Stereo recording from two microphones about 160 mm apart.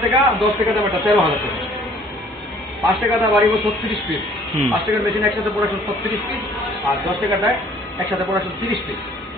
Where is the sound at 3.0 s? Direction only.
Centre (ahead or behind).